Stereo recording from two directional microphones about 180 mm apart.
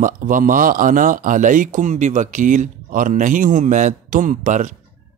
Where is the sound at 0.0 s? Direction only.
50° right (ahead or behind).